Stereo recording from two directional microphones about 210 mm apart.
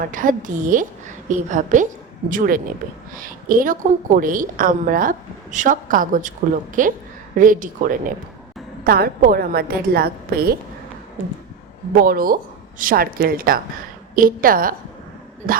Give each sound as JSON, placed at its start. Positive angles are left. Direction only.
{"t": 0.0, "sound": "a woman's voice", "side_deg": -40}
{"t": 11.9, "sound": "a woman's voice", "side_deg": -45}